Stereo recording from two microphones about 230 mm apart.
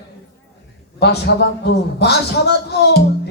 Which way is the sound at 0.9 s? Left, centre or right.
Left.